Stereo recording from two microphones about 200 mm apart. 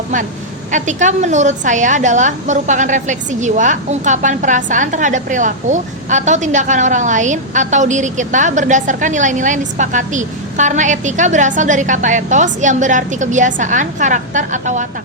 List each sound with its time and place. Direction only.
0.7 s a woman's voice: 40° right (ahead or behind)